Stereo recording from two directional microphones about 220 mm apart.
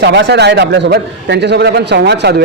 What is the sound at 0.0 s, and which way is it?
A man's voice, 50° right (ahead or behind).